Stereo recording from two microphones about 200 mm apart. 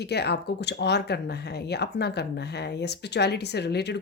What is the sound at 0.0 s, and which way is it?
Speech, 55° left (ahead or behind).